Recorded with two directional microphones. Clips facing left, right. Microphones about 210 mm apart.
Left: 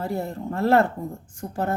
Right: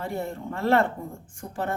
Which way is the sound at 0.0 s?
40° left (ahead or behind).